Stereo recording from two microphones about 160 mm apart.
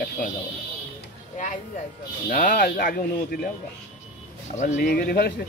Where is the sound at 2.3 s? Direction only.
60° left (ahead or behind).